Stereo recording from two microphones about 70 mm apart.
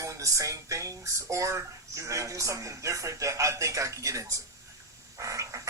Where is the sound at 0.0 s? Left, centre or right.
Right.